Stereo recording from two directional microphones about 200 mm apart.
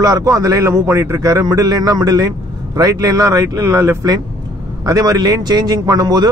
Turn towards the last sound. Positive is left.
turn(degrees=-20)  # may be behind; listen again after turning